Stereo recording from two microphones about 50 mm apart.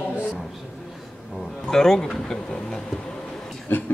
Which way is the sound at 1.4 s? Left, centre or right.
Centre.